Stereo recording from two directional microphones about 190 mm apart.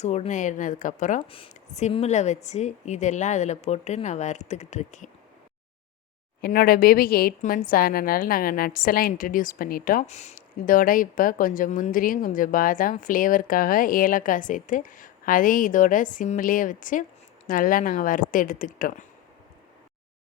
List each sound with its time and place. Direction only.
0.0 s a woman's voice: 35° left (ahead or behind)
1.2 s a woman's voice: 30° left (ahead or behind)
6.4 s a woman's voice: 50° left (ahead or behind)